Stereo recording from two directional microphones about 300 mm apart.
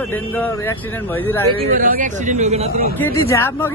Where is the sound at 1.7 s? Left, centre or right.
Right.